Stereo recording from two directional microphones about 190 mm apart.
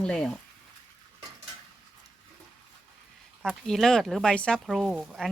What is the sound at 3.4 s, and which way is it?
Speech, centre (ahead or behind).